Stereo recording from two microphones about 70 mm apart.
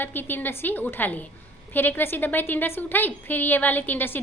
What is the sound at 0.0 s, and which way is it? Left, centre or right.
A woman's voice, left.